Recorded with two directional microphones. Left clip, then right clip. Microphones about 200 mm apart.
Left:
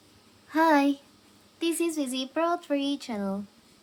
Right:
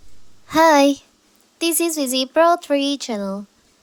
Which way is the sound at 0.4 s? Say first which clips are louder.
Right 9 dB; 45° right (ahead or behind).